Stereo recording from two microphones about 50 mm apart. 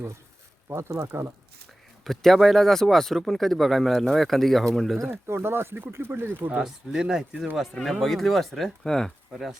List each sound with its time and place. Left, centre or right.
0.7 s speech: right
2.0 s speech: centre
5.1 s speech: right
6.6 s speech: centre
7.5 s speech: centre
9.3 s speech: centre